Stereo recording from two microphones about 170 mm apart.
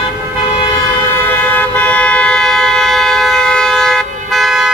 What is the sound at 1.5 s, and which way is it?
Vehicle, 10° left (ahead or behind).